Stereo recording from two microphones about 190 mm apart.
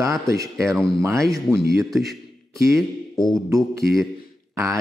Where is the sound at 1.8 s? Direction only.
Centre (ahead or behind).